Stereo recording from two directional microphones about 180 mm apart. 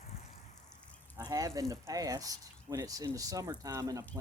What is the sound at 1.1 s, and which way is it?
Speech, 20° right (ahead or behind).